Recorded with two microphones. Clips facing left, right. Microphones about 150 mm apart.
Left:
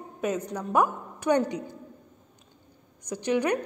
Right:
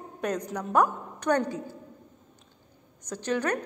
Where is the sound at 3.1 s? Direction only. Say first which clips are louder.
Left 3 dB; 10° left (ahead or behind).